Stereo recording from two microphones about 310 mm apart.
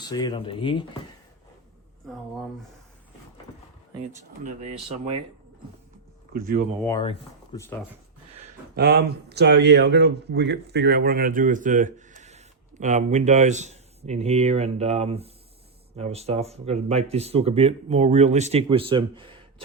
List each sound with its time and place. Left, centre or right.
0.0 s speech: centre
2.0 s speech: centre
4.4 s speech: right
6.3 s speech: right
6.8 s speech: centre
8.7 s speech: right